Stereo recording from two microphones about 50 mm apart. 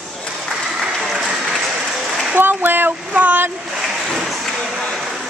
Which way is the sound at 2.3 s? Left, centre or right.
Right.